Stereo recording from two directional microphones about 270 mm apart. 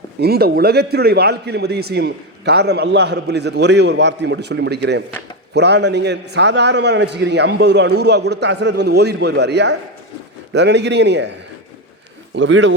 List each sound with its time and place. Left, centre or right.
0.2 s a man's voice: right
12.3 s speech: right